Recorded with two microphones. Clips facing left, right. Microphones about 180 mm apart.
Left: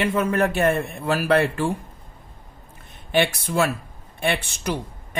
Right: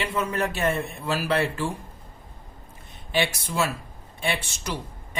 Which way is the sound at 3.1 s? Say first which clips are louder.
Left 5 dB; 55° left (ahead or behind).